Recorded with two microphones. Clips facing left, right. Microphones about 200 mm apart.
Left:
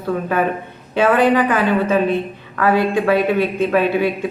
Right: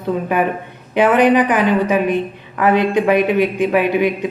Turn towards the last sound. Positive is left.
turn(degrees=-15)  # may be behind; listen again after turning